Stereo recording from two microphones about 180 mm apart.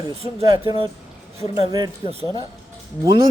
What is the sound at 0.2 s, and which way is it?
Speech, 35° right (ahead or behind).